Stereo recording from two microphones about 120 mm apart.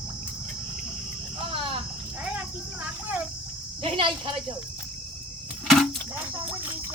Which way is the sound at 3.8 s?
45° right (ahead or behind).